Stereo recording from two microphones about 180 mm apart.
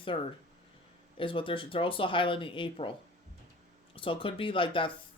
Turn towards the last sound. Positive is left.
turn(degrees=30)  # may be behind; listen again after turning